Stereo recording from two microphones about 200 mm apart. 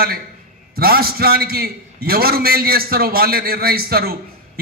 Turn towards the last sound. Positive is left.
turn(degrees=-50)  # may be behind; listen again after turning